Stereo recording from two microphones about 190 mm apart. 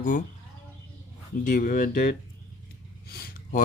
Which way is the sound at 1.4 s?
45° left (ahead or behind).